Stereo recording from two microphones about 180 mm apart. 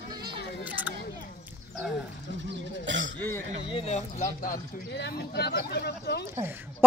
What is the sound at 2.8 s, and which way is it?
Throat clearing, 90° right.